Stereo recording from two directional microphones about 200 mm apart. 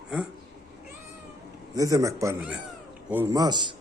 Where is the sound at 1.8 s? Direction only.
15° right (ahead or behind).